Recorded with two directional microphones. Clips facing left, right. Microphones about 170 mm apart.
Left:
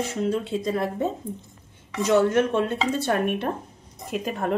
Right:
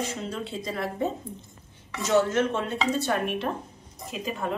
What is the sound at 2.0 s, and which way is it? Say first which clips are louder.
A woman's voice: left 3 dB; 55° left (ahead or behind).